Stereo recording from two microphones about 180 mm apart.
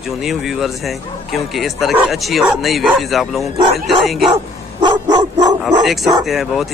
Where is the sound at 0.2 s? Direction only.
Centre (ahead or behind).